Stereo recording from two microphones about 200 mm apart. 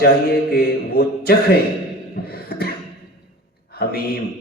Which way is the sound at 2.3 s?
50° left (ahead or behind).